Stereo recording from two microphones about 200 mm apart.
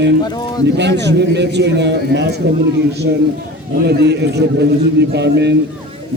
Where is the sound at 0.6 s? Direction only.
60° right (ahead or behind).